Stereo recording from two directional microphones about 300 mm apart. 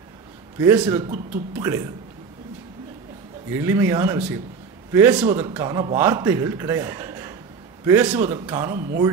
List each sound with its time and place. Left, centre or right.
0.6 s a man's voice: centre
3.5 s a man's voice: centre
8.7 s speech: right